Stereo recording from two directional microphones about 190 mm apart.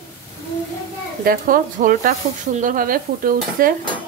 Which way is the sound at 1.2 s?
50° right (ahead or behind).